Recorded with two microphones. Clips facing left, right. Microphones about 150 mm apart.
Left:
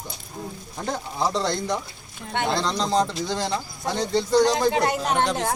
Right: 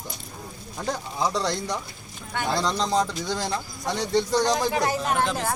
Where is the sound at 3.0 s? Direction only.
25° left (ahead or behind).